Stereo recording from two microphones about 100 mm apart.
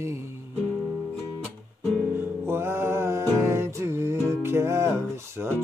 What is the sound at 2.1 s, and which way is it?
Music, 25° right (ahead or behind).